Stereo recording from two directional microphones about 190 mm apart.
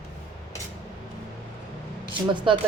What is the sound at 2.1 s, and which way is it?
Speech, 25° right (ahead or behind).